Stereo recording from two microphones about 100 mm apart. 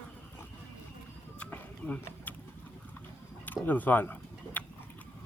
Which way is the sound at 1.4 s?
15° left (ahead or behind).